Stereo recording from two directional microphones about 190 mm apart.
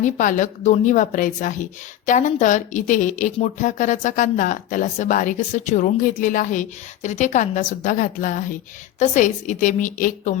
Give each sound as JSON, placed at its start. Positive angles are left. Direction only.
{"t": 0.0, "sound": "speech", "side_deg": 40}